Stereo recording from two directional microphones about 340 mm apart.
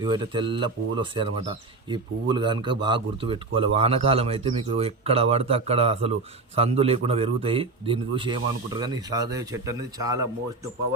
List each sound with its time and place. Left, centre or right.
0.0 s speech: centre